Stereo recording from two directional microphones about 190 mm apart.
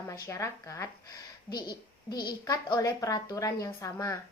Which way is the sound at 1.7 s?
55° left (ahead or behind).